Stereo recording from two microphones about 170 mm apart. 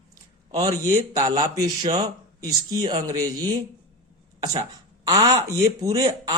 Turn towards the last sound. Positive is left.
turn(degrees=-20)  # may be behind; listen again after turning